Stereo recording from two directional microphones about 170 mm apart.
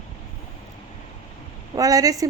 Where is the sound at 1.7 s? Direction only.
20° right (ahead or behind).